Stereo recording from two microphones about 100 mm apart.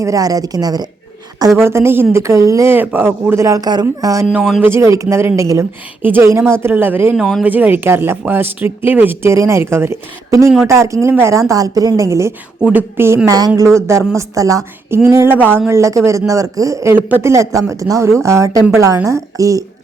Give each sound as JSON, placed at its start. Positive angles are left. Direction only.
{"t": 0.0, "sound": "speech", "side_deg": -35}
{"t": 1.5, "sound": "speech", "side_deg": -25}
{"t": 6.0, "sound": "speech", "side_deg": -20}
{"t": 7.2, "sound": "speech", "side_deg": 0}
{"t": 7.4, "sound": "speech", "side_deg": -15}
{"t": 12.6, "sound": "speech", "side_deg": -20}
{"t": 13.2, "sound": "speech", "side_deg": -40}
{"t": 16.9, "sound": "speech", "side_deg": -25}